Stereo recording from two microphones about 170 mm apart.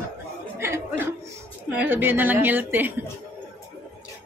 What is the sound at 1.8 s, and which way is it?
A woman's voice, 10° right (ahead or behind).